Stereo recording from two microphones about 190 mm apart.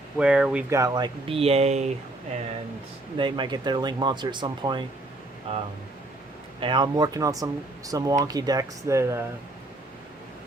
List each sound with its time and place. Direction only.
0.2 s speech: 5° right (ahead or behind)
0.7 s speech: 15° right (ahead or behind); by 1.9 s 35° right (ahead or behind)
3.2 s speech: 25° right (ahead or behind)